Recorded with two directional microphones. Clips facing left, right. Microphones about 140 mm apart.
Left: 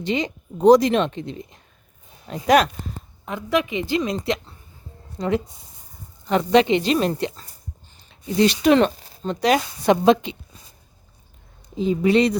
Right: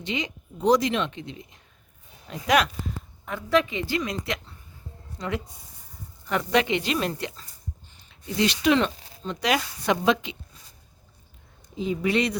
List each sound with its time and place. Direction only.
0.0 s speech: 35° left (ahead or behind)
3.2 s a woman's voice: 15° left (ahead or behind)
8.4 s speech: 40° left (ahead or behind)
11.8 s a woman's voice: 30° left (ahead or behind)